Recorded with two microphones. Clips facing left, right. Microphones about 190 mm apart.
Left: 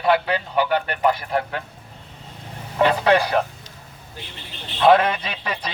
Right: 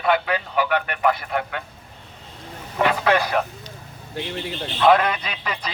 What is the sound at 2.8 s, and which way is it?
Speech, 35° left (ahead or behind).